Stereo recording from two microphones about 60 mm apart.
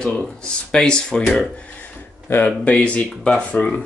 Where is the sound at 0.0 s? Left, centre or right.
Centre.